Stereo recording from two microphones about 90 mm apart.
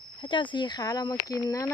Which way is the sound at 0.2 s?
65° left (ahead or behind).